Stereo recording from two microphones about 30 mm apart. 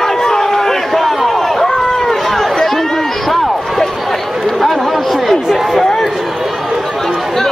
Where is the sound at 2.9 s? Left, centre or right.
Centre.